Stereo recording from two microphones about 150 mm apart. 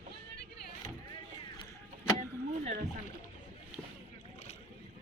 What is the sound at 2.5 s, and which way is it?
Speech, 55° right (ahead or behind).